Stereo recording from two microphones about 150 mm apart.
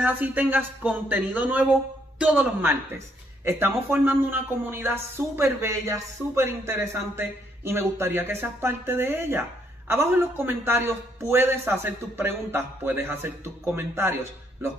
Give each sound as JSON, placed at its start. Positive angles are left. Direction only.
{"t": 0.0, "sound": "speech", "side_deg": -10}